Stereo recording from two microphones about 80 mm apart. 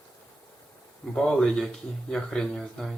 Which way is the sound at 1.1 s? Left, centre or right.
Centre.